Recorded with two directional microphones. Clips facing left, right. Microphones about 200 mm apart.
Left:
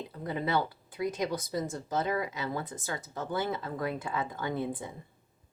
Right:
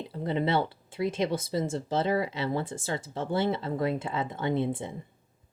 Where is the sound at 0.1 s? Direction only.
25° right (ahead or behind).